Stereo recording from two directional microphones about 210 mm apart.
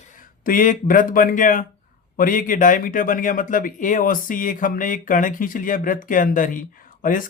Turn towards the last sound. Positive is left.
turn(degrees=40)  # may be behind; listen again after turning